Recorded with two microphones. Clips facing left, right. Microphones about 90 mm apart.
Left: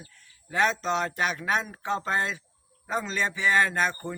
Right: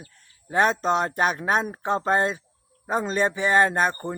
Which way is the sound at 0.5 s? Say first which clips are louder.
Right 4 dB; 45° right (ahead or behind).